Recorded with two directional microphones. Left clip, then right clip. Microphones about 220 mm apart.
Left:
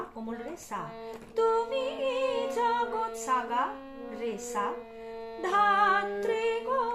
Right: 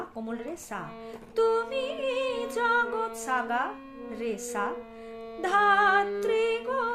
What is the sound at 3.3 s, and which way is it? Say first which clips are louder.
Music: even; 50° right (ahead or behind).